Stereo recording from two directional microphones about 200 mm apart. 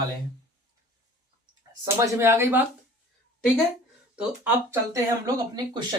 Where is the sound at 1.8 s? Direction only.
10° right (ahead or behind).